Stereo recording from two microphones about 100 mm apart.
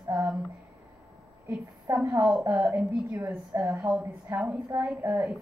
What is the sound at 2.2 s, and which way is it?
A woman's voice, 15° right (ahead or behind).